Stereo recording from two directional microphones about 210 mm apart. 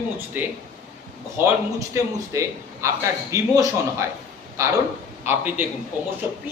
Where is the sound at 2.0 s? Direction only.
15° right (ahead or behind).